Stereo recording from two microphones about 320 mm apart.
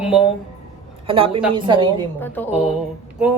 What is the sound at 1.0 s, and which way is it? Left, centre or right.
A woman's voice, centre.